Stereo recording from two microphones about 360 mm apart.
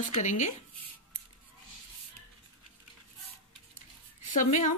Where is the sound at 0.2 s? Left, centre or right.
Centre.